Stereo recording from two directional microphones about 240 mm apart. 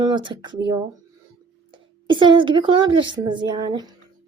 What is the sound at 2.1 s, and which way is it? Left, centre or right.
A woman's voice, centre.